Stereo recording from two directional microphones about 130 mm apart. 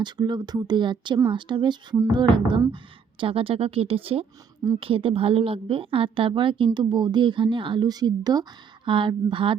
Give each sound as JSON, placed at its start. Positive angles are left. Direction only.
{"t": 0.0, "sound": "a woman's voice", "side_deg": -35}